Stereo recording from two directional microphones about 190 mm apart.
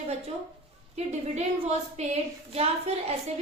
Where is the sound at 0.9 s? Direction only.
35° right (ahead or behind).